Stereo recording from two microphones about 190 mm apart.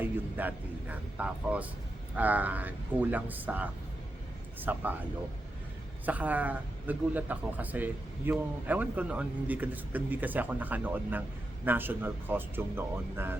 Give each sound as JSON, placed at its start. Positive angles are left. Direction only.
{"t": 0.0, "sound": "vehicle", "side_deg": -10}
{"t": 2.1, "sound": "speech", "side_deg": -10}
{"t": 6.1, "sound": "speech", "side_deg": -10}